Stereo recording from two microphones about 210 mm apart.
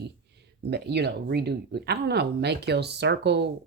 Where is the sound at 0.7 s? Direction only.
50° right (ahead or behind).